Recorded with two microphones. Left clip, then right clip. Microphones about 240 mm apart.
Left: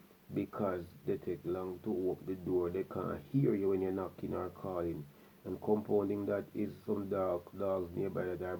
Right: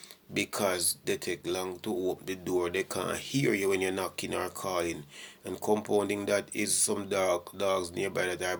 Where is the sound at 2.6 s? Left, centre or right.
Right.